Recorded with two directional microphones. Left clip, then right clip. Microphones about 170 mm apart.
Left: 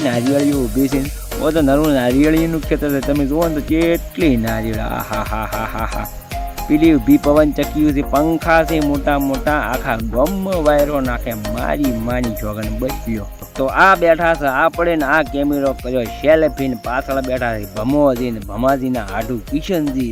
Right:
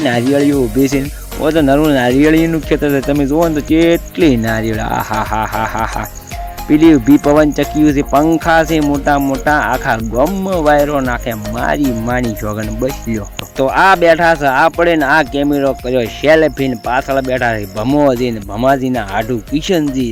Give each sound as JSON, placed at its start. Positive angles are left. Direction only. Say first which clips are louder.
{"t": 0.0, "sound": "speech", "louder": "right 4 dB", "side_deg": -20}